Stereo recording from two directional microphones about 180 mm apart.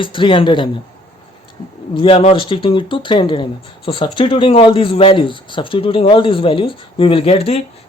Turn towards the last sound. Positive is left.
turn(degrees=35)  # may be behind; listen again after turning